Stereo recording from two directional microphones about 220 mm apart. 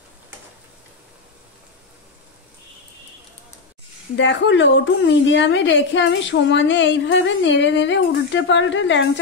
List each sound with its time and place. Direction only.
4.2 s a woman's voice: 55° left (ahead or behind)